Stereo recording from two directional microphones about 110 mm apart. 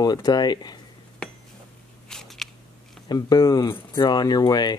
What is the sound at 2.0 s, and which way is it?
Biting, 5° left (ahead or behind).